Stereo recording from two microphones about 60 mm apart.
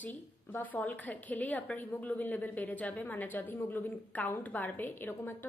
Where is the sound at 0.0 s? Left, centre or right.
Left.